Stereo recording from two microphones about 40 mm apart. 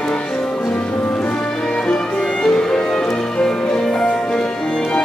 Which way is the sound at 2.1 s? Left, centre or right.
Centre.